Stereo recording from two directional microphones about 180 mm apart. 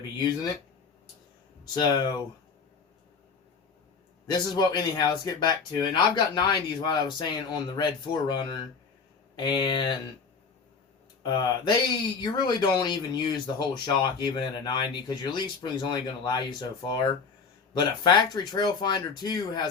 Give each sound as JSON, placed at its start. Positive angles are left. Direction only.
{"t": 1.7, "sound": "speech", "side_deg": 25}
{"t": 4.3, "sound": "speech", "side_deg": 20}
{"t": 11.2, "sound": "speech", "side_deg": 25}